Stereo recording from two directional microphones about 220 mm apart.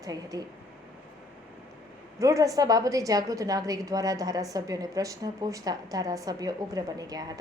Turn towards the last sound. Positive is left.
turn(degrees=-15)  # may be behind; listen again after turning